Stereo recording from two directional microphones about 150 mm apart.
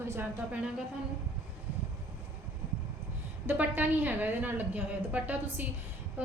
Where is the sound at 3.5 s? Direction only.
10° right (ahead or behind).